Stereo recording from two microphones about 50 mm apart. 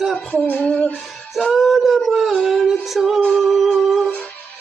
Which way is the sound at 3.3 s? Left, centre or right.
Centre.